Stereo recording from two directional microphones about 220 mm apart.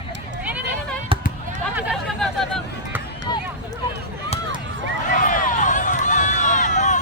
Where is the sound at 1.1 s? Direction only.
25° right (ahead or behind).